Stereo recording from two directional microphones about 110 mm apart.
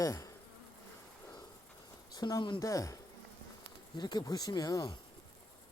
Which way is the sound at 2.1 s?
40° left (ahead or behind).